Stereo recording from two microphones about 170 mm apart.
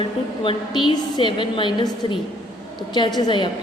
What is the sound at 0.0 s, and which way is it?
A woman's voice, 30° left (ahead or behind).